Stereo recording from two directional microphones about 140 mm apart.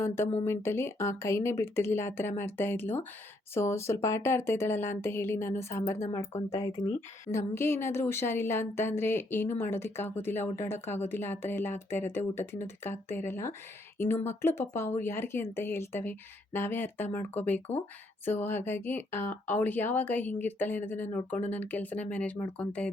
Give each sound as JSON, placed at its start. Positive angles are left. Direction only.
{"t": 0.0, "sound": "a woman's voice", "side_deg": 15}
{"t": 7.3, "sound": "a woman's voice", "side_deg": 20}